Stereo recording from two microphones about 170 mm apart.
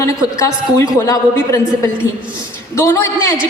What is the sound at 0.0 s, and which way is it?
A woman's voice, 15° left (ahead or behind).